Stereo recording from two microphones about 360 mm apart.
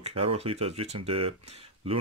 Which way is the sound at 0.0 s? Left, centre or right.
Centre.